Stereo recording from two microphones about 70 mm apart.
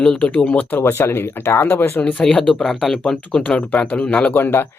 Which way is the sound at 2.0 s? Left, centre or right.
Centre.